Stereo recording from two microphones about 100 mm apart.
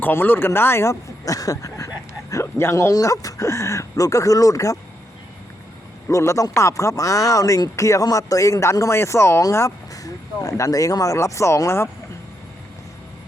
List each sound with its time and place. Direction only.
0.0 s speech: 20° left (ahead or behind)
6.1 s speech: 30° left (ahead or behind)